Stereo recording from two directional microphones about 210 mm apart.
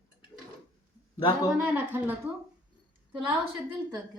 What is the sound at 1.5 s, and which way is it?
Speech, 10° right (ahead or behind).